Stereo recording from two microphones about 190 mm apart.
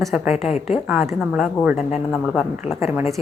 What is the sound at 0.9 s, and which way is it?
Speech, 5° right (ahead or behind).